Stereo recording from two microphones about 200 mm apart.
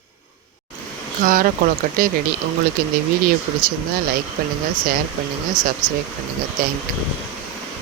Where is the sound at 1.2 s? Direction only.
45° right (ahead or behind).